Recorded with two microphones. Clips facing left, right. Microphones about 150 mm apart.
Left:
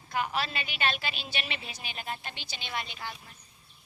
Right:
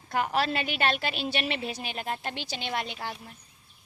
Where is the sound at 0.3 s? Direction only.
55° right (ahead or behind).